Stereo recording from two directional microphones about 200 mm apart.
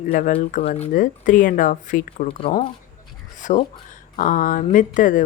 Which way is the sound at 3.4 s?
40° left (ahead or behind).